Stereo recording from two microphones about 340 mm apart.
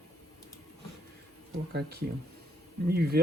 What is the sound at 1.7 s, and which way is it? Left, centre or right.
Speech, right.